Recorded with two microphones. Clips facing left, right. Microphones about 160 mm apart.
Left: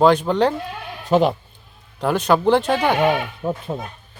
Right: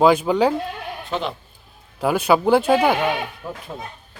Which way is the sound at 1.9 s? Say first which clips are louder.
Even; 10° right (ahead or behind).